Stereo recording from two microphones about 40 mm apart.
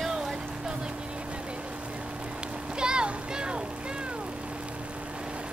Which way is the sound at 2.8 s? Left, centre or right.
Right.